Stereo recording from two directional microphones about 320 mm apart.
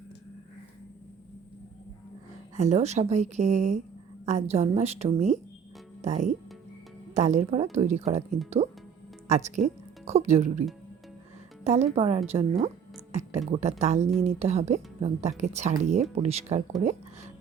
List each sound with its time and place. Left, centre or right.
2.6 s speech: right
9.6 s speech: right
11.6 s speech: right